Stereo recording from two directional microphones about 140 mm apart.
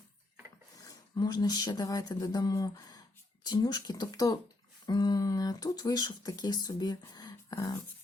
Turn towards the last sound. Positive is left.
turn(degrees=30)  # may be behind; listen again after turning